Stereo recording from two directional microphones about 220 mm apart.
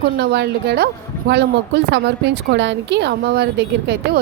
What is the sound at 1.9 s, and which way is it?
Speech, 50° right (ahead or behind).